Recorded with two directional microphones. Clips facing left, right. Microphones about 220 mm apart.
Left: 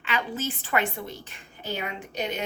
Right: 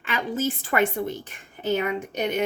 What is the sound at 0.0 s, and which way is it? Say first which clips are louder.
Speech: right 4 dB; 45° right (ahead or behind).